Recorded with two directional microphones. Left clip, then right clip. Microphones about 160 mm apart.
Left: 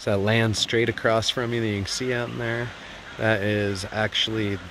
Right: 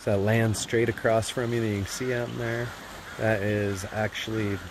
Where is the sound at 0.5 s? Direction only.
10° left (ahead or behind).